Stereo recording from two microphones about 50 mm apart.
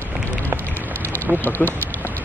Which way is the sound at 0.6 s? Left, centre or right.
Left.